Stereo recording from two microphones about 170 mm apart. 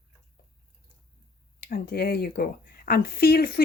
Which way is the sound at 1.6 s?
60° left (ahead or behind).